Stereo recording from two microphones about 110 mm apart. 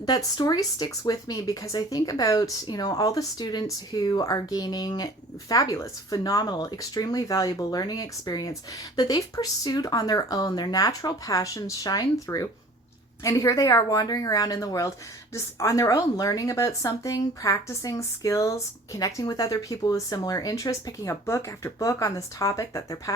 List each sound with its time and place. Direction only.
0.3 s speech: 40° left (ahead or behind)